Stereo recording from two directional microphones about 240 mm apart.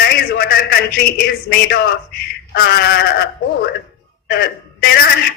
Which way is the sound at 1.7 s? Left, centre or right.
Left.